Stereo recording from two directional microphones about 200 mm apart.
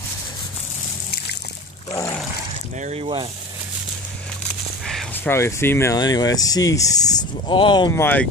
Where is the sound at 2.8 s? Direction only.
30° right (ahead or behind).